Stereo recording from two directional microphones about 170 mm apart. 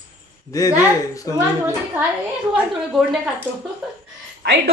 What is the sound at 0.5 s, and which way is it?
Speech, 20° left (ahead or behind).